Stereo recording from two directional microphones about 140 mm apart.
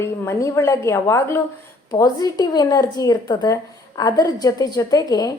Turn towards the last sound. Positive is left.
turn(degrees=25)  # may be behind; listen again after turning